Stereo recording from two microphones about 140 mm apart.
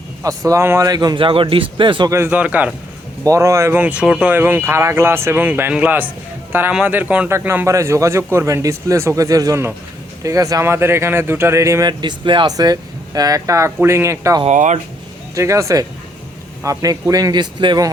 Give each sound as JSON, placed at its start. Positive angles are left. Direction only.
{"t": 0.2, "sound": "a man's voice", "side_deg": -25}
{"t": 2.0, "sound": "speech", "side_deg": -20}
{"t": 3.2, "sound": "speech", "side_deg": -20}
{"t": 14.4, "sound": "speech", "side_deg": -60}
{"t": 15.4, "sound": "speech", "side_deg": -20}